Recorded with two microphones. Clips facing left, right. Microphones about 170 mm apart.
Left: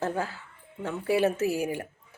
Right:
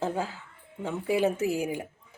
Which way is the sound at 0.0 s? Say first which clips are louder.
Even; 15° right (ahead or behind).